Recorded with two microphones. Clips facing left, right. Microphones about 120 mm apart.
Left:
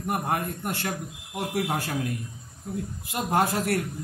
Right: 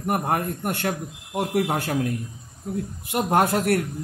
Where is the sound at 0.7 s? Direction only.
55° right (ahead or behind).